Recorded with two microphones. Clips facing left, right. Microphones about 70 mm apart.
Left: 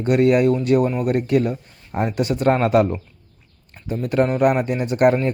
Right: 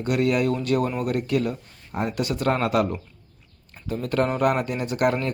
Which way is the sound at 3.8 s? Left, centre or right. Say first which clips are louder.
Left 4 dB; centre.